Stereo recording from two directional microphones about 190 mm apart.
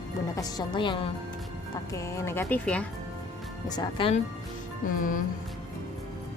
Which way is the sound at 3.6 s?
20° left (ahead or behind).